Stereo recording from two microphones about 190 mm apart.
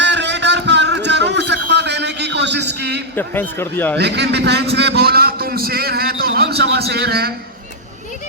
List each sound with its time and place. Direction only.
0.0 s a sound: 65° right (ahead or behind)
3.2 s speech: 10° left (ahead or behind)
3.9 s a man's voice: 60° right (ahead or behind)